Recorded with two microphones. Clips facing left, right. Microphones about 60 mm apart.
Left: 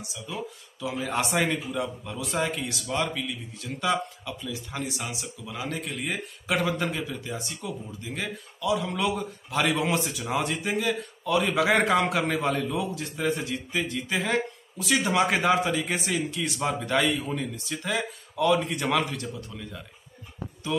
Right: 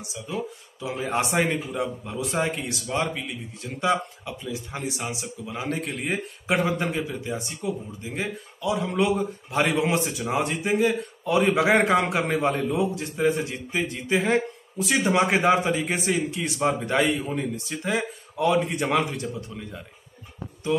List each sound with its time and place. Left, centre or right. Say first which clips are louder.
0.1 s speech: right 5 dB; right